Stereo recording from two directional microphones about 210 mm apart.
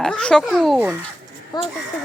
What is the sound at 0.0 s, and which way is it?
Speech, 5° left (ahead or behind).